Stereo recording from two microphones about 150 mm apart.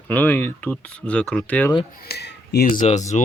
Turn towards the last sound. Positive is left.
turn(degrees=50)  # may be behind; listen again after turning